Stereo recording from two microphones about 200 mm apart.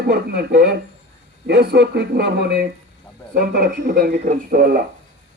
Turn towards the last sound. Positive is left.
turn(degrees=-45)  # may be behind; listen again after turning